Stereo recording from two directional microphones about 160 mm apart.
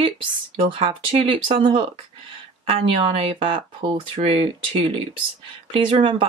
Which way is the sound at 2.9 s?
35° right (ahead or behind).